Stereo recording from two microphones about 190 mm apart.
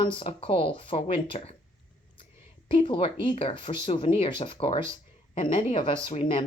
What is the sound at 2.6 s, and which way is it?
Speech, 25° left (ahead or behind).